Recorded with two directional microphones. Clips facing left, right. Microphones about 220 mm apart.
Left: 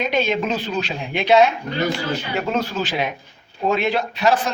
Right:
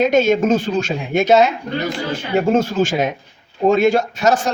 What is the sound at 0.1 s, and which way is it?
Speech, 45° right (ahead or behind).